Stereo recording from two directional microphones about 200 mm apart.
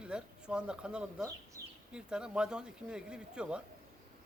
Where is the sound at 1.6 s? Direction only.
45° right (ahead or behind).